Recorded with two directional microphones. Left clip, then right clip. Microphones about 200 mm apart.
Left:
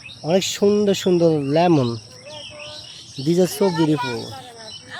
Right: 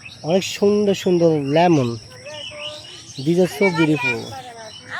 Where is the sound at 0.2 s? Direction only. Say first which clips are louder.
Even; 10° left (ahead or behind).